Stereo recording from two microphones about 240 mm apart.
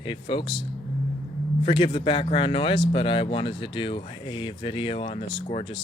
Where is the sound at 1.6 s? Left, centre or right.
Left.